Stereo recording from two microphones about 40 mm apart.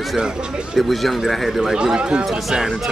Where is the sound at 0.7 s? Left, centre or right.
Centre.